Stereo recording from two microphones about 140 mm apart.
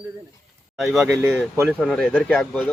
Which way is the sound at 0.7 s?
Centre (ahead or behind).